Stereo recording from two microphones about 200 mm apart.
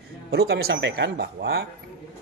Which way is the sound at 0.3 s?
55° right (ahead or behind).